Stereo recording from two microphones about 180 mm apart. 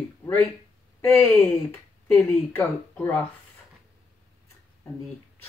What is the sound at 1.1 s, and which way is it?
Speech, 10° left (ahead or behind).